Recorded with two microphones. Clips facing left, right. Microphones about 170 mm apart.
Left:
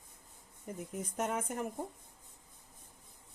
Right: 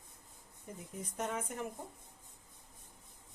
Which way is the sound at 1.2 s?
50° left (ahead or behind).